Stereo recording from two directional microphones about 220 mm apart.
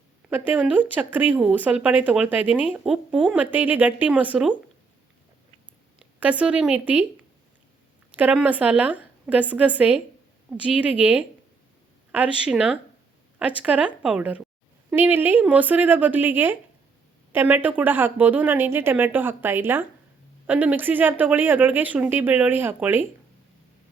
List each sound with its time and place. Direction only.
0.3 s speech: 10° right (ahead or behind)
6.0 s speech: 5° right (ahead or behind)
8.1 s speech: 5° right (ahead or behind)